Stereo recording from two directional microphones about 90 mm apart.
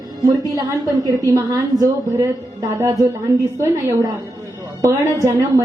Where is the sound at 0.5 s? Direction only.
40° right (ahead or behind).